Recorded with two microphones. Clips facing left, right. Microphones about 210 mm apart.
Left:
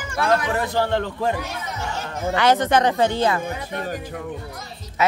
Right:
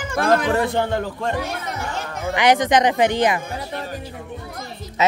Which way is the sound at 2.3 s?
15° right (ahead or behind).